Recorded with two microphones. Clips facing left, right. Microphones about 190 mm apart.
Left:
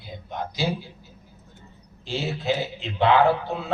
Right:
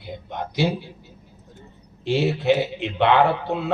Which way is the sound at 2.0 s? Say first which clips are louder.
Right 8 dB; 70° right (ahead or behind).